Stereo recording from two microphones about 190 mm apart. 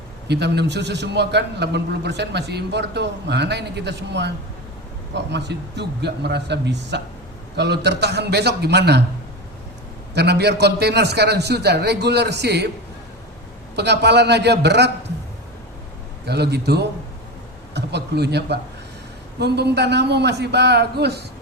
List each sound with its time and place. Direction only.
0.3 s a man's voice: 60° right (ahead or behind)
10.2 s a man's voice: 60° right (ahead or behind)
13.7 s a man's voice: 60° right (ahead or behind)
16.2 s a man's voice: 60° right (ahead or behind)